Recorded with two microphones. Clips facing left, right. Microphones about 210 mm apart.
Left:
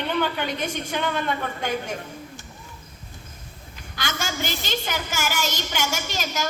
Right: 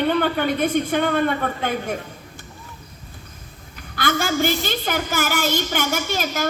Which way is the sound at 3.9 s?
55° right (ahead or behind).